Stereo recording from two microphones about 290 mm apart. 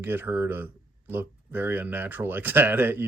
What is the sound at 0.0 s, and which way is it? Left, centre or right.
Speech, centre.